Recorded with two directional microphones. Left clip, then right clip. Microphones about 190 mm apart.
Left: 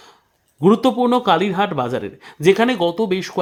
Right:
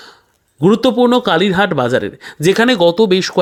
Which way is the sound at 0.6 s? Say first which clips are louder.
Right 4 dB; 20° right (ahead or behind).